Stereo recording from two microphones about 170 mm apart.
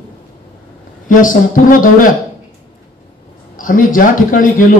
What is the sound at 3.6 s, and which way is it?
Speech, 55° left (ahead or behind).